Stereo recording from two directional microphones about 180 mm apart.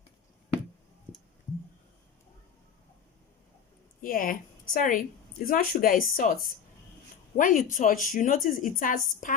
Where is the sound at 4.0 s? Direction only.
50° left (ahead or behind).